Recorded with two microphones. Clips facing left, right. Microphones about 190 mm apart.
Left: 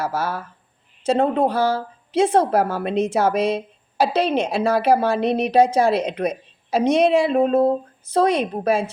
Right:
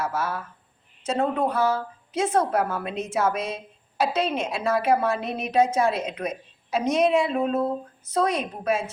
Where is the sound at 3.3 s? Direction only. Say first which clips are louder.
Left 8 dB; 70° left (ahead or behind).